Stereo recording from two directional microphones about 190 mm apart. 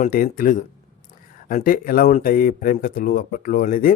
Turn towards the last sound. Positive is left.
turn(degrees=45)  # may be behind; listen again after turning